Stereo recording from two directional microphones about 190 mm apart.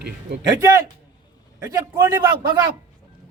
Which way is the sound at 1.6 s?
10° right (ahead or behind).